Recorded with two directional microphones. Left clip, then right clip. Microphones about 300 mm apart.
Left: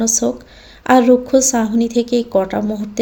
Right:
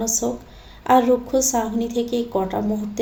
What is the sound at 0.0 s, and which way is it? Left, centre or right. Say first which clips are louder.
A woman's voice: left 6 dB; left.